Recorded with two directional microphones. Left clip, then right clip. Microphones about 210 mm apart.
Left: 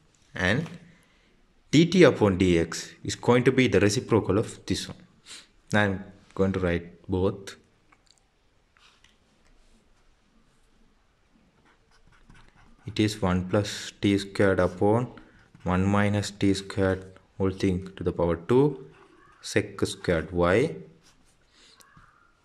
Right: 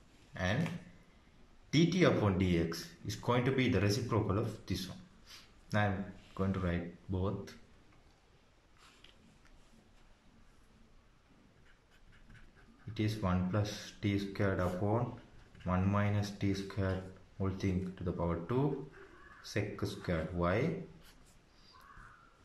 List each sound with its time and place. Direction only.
0.3 s a sound: 45° left (ahead or behind)
1.7 s speech: 45° left (ahead or behind)
12.9 s speech: 45° left (ahead or behind)